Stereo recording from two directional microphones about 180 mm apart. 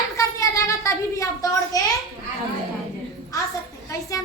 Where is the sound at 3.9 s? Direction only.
20° left (ahead or behind).